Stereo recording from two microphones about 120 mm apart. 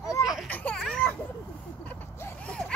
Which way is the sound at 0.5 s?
10° left (ahead or behind).